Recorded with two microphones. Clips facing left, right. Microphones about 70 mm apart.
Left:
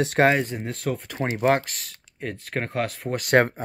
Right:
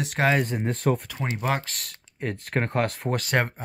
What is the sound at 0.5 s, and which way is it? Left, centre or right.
Speech, centre.